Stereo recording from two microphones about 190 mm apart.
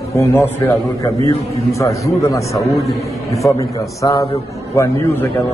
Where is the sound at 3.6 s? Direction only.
20° left (ahead or behind).